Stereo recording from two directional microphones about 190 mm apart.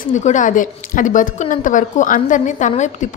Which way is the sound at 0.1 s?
40° left (ahead or behind).